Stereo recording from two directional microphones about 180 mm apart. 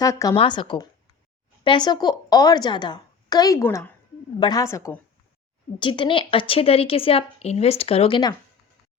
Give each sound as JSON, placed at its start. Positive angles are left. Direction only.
{"t": 0.0, "sound": "a woman's voice", "side_deg": 20}
{"t": 5.8, "sound": "a woman's voice", "side_deg": 25}